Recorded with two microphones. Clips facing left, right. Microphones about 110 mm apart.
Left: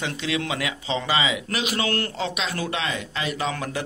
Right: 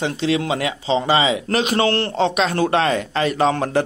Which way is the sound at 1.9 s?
30° right (ahead or behind).